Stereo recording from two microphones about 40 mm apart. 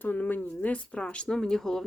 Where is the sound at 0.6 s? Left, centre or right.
Left.